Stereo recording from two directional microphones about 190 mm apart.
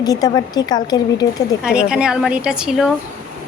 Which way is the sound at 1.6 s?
5° right (ahead or behind).